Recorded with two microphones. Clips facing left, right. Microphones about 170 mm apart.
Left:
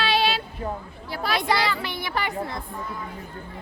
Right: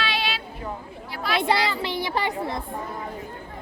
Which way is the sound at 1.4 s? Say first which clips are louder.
Right 3 dB; 25° right (ahead or behind).